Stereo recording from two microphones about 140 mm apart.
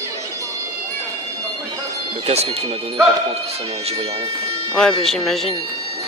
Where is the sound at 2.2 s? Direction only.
50° right (ahead or behind).